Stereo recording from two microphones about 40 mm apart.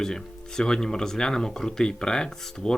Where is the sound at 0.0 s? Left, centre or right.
Centre.